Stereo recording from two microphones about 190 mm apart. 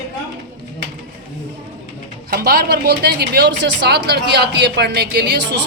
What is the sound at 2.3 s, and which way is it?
Speech, 55° right (ahead or behind).